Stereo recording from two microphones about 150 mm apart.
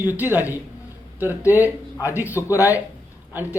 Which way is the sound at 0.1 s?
10° right (ahead or behind).